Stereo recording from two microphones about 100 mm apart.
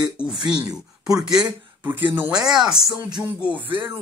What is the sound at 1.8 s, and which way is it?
Speech, 20° right (ahead or behind).